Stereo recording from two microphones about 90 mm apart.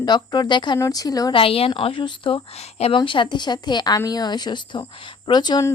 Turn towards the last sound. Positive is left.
turn(degrees=55)  # may be behind; listen again after turning